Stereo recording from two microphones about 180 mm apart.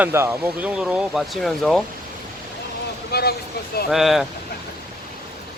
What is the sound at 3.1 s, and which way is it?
Vehicle, 60° left (ahead or behind).